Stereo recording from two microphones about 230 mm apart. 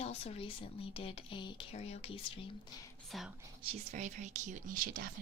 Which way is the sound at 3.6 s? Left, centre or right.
Right.